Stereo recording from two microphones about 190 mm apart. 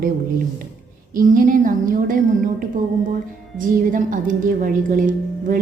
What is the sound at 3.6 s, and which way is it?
A woman's voice, 45° right (ahead or behind).